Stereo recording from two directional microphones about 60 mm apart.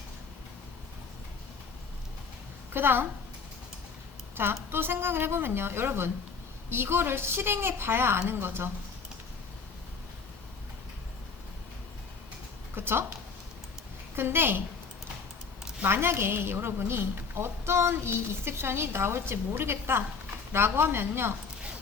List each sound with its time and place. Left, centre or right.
2.7 s a woman's voice: right
4.4 s a woman's voice: right
12.7 s a woman's voice: right
14.2 s a woman's voice: right
15.8 s a woman's voice: right